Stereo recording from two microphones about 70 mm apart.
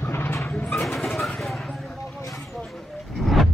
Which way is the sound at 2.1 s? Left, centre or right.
Left.